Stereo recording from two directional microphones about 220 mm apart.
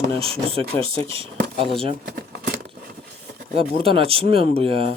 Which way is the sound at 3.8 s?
25° right (ahead or behind).